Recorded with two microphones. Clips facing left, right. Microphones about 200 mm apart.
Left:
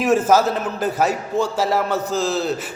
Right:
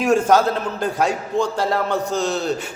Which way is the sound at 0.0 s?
5° left (ahead or behind).